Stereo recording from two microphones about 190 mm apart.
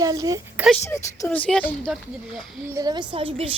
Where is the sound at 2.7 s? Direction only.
20° right (ahead or behind).